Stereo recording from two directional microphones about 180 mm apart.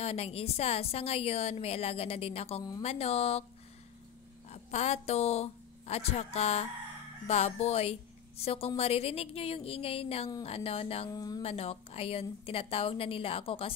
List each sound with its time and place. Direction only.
0.0 s a woman's voice: 35° left (ahead or behind)
4.5 s a woman's voice: 35° left (ahead or behind)
11.1 s speech: 20° left (ahead or behind)
11.4 s a woman's voice: 35° left (ahead or behind)